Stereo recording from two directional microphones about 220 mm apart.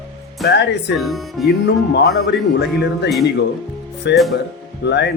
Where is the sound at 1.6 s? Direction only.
50° left (ahead or behind).